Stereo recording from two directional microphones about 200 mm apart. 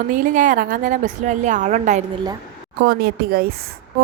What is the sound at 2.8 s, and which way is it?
Speech, 50° right (ahead or behind).